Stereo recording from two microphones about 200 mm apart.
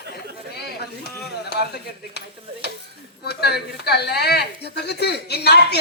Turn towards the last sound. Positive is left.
turn(degrees=55)  # may be behind; listen again after turning